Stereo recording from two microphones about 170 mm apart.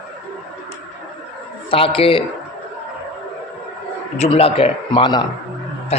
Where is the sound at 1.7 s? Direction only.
35° left (ahead or behind).